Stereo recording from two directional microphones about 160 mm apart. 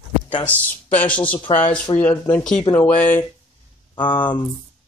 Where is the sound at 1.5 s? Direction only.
35° left (ahead or behind).